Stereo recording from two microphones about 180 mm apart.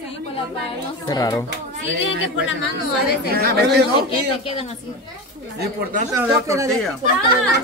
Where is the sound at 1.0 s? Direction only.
20° left (ahead or behind).